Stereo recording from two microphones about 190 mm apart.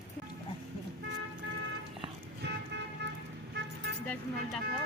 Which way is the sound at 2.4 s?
65° right (ahead or behind).